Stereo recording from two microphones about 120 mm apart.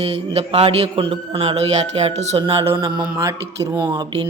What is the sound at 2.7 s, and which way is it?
Speech, 40° right (ahead or behind).